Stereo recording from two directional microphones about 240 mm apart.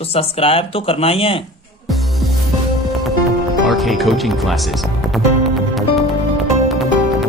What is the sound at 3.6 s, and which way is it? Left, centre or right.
Speech, centre.